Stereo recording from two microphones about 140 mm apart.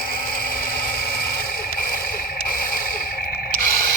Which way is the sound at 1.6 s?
90° left.